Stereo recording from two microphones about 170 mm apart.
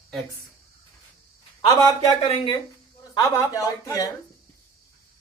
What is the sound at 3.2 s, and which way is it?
Speech, 20° left (ahead or behind).